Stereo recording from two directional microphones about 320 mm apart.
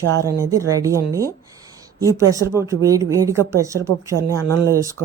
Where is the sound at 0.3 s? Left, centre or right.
Centre.